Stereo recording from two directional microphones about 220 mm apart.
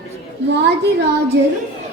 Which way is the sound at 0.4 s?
50° right (ahead or behind).